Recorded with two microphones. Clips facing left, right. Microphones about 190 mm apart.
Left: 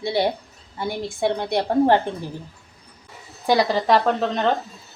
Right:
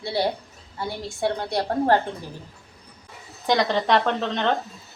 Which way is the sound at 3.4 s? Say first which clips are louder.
Left 3 dB; 5° left (ahead or behind).